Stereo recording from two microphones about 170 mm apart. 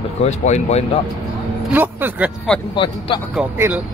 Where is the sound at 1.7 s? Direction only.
10° right (ahead or behind).